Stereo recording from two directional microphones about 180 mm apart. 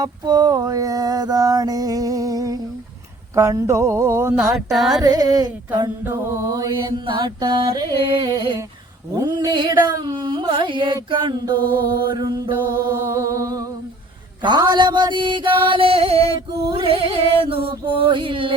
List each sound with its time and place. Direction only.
0.0 s mantra: 20° right (ahead or behind)
3.3 s speech: 15° right (ahead or behind)
4.5 s music: centre (ahead or behind)
5.0 s music: 20° right (ahead or behind)
6.1 s speech: 15° right (ahead or behind)
7.0 s music: 25° right (ahead or behind)
12.8 s music: 20° right (ahead or behind)